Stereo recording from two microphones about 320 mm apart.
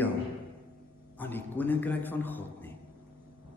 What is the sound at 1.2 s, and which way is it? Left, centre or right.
A man's voice, centre.